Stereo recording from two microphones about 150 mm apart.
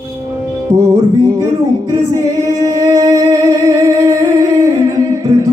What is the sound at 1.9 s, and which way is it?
Singing, 20° right (ahead or behind).